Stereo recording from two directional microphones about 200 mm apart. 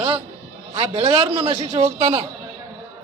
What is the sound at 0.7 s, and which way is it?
A man's voice, 25° right (ahead or behind).